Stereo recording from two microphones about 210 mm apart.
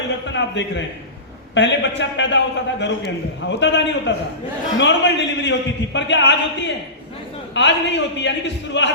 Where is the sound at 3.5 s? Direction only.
55° left (ahead or behind).